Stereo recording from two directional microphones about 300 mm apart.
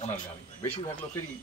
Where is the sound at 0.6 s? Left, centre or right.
Centre.